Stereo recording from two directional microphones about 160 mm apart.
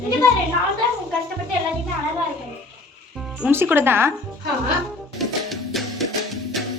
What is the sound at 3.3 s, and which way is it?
Music, 10° right (ahead or behind).